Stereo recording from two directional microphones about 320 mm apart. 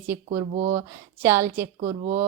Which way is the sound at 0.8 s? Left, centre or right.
Centre.